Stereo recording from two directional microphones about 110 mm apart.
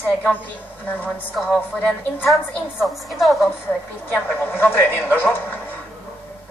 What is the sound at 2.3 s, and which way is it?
A woman's voice, centre (ahead or behind).